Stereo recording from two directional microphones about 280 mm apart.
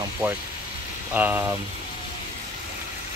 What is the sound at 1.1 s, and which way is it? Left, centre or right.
Speech, centre.